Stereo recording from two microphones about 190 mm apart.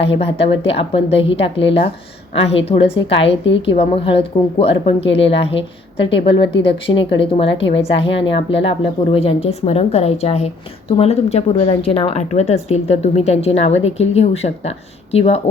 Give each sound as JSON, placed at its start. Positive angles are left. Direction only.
{"t": 0.0, "sound": "speech", "side_deg": 30}
{"t": 3.2, "sound": "a woman's voice", "side_deg": 75}
{"t": 3.7, "sound": "speech", "side_deg": 30}
{"t": 6.6, "sound": "speech", "side_deg": 30}